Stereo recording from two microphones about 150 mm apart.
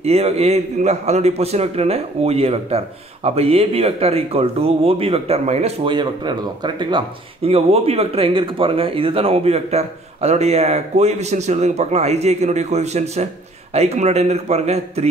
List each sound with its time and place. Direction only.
0.0 s speech: 45° right (ahead or behind)
5.9 s speech: 30° right (ahead or behind); by 15.0 s 45° right (ahead or behind)